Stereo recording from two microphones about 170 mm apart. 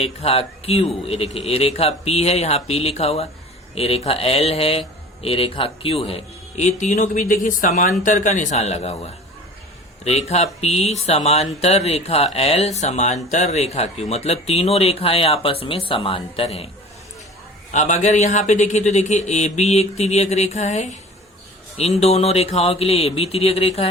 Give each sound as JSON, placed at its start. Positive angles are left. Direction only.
{"t": 0.0, "sound": "a man's voice", "side_deg": 35}
{"t": 17.7, "sound": "a man's voice", "side_deg": 45}